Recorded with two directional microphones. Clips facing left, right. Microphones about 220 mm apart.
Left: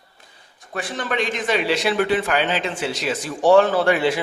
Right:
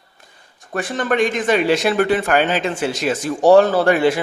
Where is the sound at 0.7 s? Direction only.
50° right (ahead or behind).